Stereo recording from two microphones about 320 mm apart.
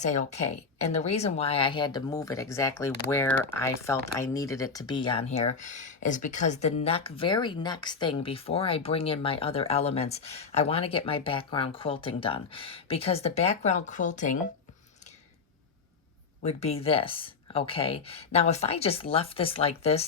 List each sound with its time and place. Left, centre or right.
0.0 s speech: left
16.4 s speech: centre